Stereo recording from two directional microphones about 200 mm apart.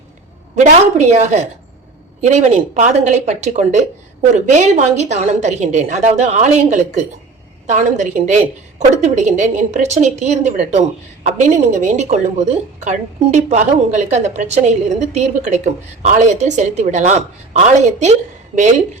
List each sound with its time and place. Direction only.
0.5 s a woman's voice: 35° right (ahead or behind)